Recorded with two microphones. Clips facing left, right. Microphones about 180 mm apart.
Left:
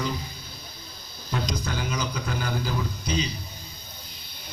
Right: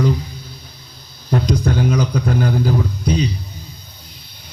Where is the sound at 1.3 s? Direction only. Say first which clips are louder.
Right 11 dB; 60° right (ahead or behind).